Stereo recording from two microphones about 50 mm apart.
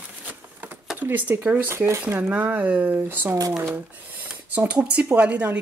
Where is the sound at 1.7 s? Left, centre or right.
Right.